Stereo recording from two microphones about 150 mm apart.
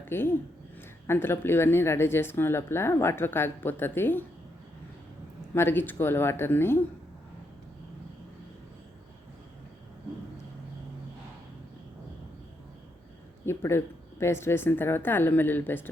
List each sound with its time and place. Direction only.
0.0 s speech: 15° left (ahead or behind)
5.5 s speech: 15° left (ahead or behind)
13.4 s speech: 15° left (ahead or behind)